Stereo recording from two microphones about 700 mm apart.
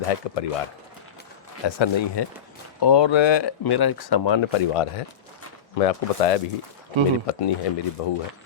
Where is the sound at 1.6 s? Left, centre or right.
Left.